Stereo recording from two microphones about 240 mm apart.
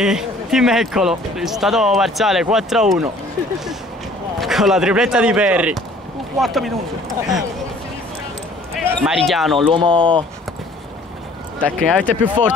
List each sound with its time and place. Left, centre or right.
0.0 s speech: centre
4.4 s speech: centre
8.7 s speech: centre
9.7 s speech: centre
11.6 s speech: centre